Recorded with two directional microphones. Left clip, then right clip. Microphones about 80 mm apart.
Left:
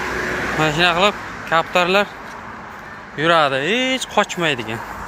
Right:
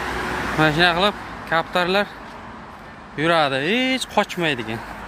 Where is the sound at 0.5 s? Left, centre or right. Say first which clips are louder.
Even; right.